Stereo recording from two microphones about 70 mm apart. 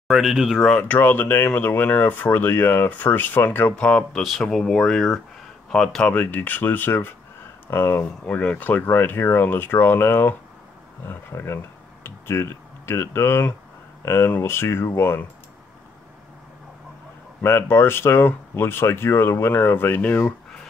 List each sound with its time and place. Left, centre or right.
0.1 s speech: centre
0.7 s speech: centre
3.7 s speech: centre
6.0 s speech: left
17.4 s speech: left